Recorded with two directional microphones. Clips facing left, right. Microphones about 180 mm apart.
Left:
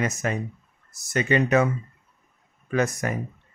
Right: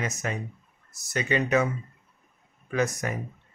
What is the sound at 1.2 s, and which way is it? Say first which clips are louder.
Speech: left 3 dB; 55° left (ahead or behind).